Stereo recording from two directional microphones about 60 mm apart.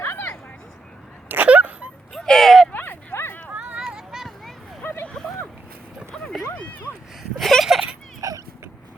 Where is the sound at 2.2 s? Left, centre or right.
Centre.